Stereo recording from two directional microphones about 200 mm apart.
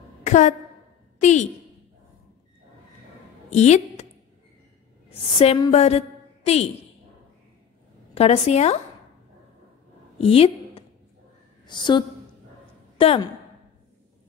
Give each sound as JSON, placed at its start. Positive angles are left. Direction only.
{"t": 0.2, "sound": "a sound", "side_deg": 35}
{"t": 1.2, "sound": "a woman's voice", "side_deg": 35}
{"t": 3.4, "sound": "a sound", "side_deg": 35}
{"t": 5.4, "sound": "a woman's voice", "side_deg": 30}
{"t": 8.1, "sound": "a woman's voice", "side_deg": 30}
{"t": 10.2, "sound": "a woman's voice", "side_deg": 30}